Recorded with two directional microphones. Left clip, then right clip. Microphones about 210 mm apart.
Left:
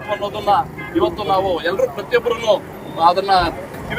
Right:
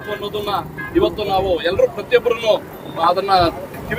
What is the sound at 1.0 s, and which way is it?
Speech, 15° left (ahead or behind).